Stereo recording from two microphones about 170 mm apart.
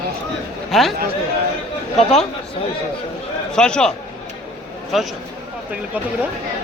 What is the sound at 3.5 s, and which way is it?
Speech, 5° left (ahead or behind).